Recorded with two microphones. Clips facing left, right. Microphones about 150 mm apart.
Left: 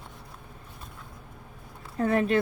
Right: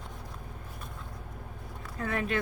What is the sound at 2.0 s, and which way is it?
Speech, 35° left (ahead or behind).